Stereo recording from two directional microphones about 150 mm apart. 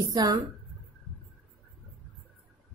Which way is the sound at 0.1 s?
25° right (ahead or behind).